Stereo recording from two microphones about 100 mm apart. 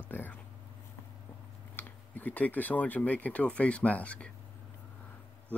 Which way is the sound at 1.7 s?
20° left (ahead or behind).